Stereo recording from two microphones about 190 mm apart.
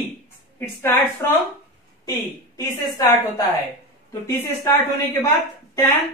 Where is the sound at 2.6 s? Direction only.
20° left (ahead or behind).